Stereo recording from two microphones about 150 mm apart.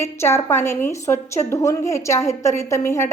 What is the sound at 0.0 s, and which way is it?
A woman's voice, 15° left (ahead or behind).